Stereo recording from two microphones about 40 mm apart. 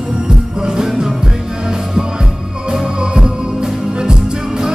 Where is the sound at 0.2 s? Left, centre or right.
Centre.